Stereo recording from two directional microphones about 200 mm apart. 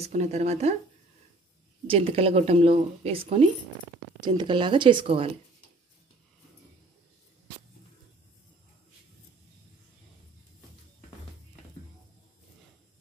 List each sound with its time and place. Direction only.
0.0 s speech: 30° right (ahead or behind)
1.9 s speech: 30° right (ahead or behind)